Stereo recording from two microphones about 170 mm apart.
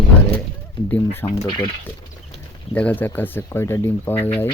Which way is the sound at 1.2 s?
10° left (ahead or behind).